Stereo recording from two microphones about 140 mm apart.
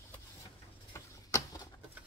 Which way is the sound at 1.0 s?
25° left (ahead or behind).